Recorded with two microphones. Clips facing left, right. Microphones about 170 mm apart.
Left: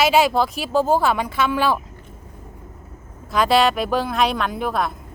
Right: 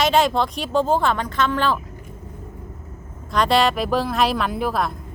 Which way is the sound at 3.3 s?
5° left (ahead or behind).